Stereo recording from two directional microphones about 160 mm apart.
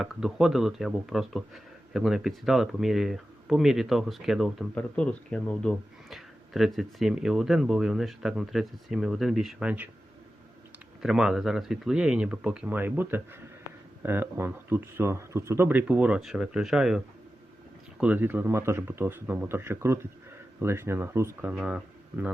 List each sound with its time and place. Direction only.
0.0 s speech: 5° right (ahead or behind)
11.0 s speech: 5° right (ahead or behind)
18.0 s speech: 10° right (ahead or behind)
21.5 s speech: 5° right (ahead or behind)
22.1 s speech: 15° right (ahead or behind)